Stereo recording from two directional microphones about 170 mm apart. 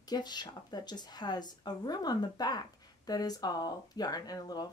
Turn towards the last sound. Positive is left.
turn(degrees=20)  # may be behind; listen again after turning